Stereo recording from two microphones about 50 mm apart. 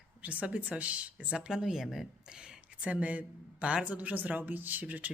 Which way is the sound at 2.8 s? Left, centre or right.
Right.